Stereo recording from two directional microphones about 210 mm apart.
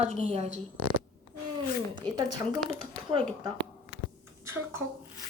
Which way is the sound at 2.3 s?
20° right (ahead or behind).